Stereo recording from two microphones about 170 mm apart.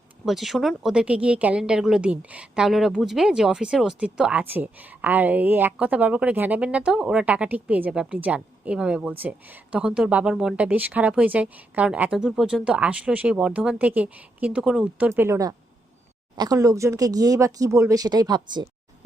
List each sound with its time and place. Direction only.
0.3 s speech: centre (ahead or behind); by 18.7 s 25° right (ahead or behind)